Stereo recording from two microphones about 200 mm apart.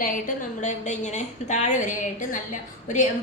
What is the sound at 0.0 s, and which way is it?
A woman's voice, 40° left (ahead or behind).